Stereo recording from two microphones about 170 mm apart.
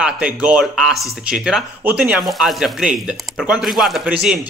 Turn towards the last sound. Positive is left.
turn(degrees=-5)  # may be behind; listen again after turning